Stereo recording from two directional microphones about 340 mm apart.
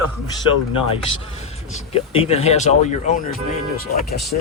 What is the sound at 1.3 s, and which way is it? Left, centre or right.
Speech, centre.